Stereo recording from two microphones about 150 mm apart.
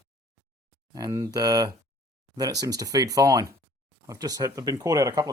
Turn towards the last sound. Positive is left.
turn(degrees=-25)  # may be behind; listen again after turning